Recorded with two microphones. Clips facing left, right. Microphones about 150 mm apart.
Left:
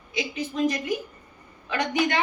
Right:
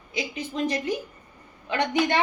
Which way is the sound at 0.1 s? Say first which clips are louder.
Left 1 dB; 30° right (ahead or behind).